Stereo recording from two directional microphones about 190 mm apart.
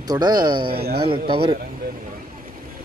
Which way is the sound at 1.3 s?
30° right (ahead or behind).